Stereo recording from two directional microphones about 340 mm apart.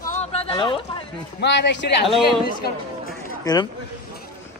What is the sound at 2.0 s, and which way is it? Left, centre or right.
Speech, centre.